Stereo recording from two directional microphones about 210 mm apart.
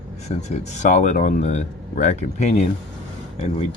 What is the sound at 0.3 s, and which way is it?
Speech, 30° left (ahead or behind).